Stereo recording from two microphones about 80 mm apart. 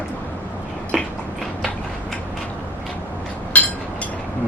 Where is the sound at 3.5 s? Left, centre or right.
Centre.